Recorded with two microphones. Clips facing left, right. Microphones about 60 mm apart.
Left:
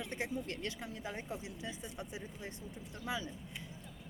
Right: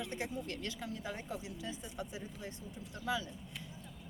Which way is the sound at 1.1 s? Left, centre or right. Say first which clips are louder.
Even; left.